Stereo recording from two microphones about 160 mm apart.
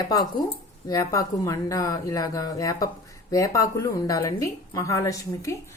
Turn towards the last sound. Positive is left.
turn(degrees=20)  # may be behind; listen again after turning